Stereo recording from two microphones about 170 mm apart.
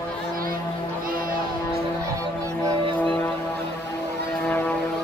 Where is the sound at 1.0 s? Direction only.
55° right (ahead or behind).